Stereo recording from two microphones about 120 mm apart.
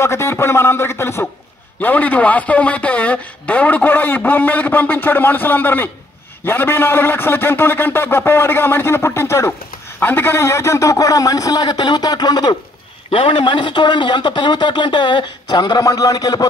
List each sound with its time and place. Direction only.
0.0 s a man's voice: 20° left (ahead or behind)
13.1 s a man's voice: 50° left (ahead or behind); by 16.4 s 30° left (ahead or behind)